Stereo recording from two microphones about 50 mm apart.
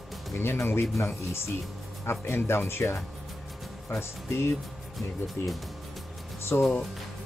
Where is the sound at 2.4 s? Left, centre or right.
Left.